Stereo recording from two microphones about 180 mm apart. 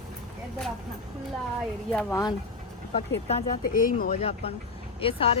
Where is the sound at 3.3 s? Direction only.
50° left (ahead or behind).